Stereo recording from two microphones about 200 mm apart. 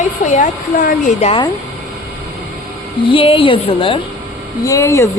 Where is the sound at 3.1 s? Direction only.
25° left (ahead or behind).